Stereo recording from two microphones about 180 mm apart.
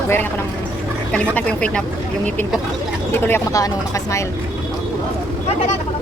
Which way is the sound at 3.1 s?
10° left (ahead or behind).